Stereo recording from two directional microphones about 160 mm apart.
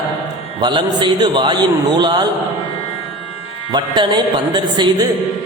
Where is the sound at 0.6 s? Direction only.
30° right (ahead or behind).